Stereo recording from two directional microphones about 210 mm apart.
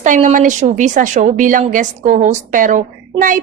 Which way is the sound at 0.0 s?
35° right (ahead or behind).